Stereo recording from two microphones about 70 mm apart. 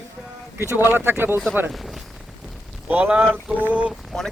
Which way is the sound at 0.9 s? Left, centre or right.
Right.